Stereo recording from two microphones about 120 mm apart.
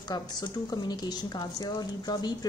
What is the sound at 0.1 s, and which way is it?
A woman's voice, 35° left (ahead or behind).